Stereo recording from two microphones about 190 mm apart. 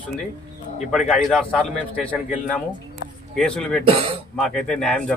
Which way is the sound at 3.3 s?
5° left (ahead or behind).